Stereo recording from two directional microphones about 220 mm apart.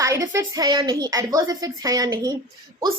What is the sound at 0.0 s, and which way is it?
A woman's voice, 15° right (ahead or behind).